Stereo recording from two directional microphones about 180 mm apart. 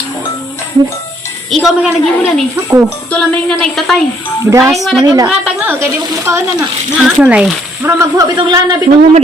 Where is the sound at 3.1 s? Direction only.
5° left (ahead or behind).